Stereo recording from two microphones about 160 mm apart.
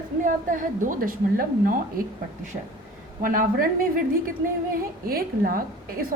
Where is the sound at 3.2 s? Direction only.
60° right (ahead or behind).